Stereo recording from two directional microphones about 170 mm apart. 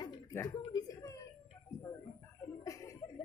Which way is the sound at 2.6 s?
20° left (ahead or behind).